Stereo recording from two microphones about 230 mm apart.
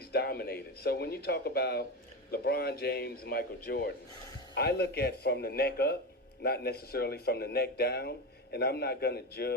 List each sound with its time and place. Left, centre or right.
0.1 s speech: left